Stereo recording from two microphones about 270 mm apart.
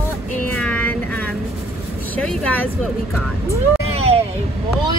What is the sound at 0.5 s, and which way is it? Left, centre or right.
Vehicle, centre.